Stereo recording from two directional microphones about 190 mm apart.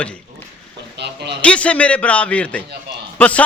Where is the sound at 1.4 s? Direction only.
5° left (ahead or behind).